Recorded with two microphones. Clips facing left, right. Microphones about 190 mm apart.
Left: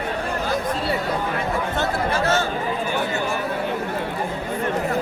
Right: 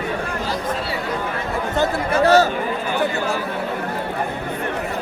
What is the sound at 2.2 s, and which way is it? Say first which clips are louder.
Speech: right 10 dB; 35° right (ahead or behind).